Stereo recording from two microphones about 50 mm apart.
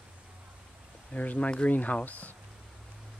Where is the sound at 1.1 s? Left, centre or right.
Left.